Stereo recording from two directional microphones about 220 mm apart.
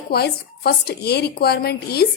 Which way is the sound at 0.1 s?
45° left (ahead or behind).